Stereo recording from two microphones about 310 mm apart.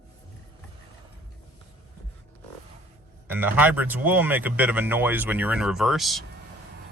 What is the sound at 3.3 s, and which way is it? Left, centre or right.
Speech, centre.